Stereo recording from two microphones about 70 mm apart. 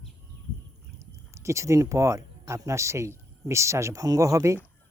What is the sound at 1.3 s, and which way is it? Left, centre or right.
Speech, right.